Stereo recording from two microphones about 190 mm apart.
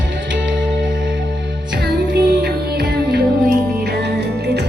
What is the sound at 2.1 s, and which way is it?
Music, 60° right (ahead or behind).